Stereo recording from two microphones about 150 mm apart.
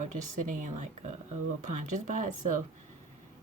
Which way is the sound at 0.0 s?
55° right (ahead or behind).